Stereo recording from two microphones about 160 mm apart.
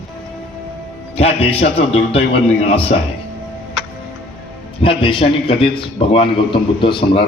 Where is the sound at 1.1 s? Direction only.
40° left (ahead or behind).